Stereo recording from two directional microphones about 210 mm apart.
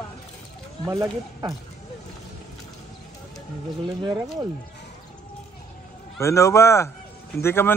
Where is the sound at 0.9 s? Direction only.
15° right (ahead or behind).